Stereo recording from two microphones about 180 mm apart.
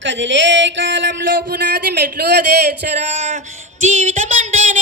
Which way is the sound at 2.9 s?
40° right (ahead or behind).